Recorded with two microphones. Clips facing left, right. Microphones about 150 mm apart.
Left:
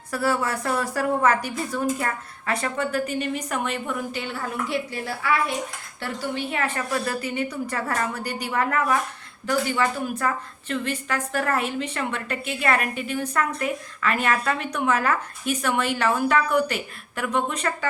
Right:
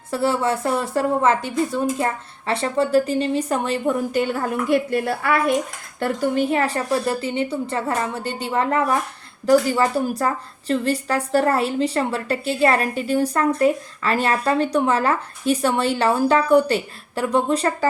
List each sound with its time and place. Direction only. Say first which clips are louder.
0.1 s a woman's voice: right 4 dB; 25° right (ahead or behind)